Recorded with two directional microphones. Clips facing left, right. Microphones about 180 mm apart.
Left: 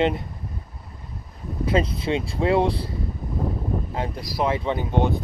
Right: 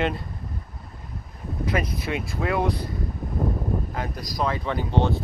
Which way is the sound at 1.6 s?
25° left (ahead or behind).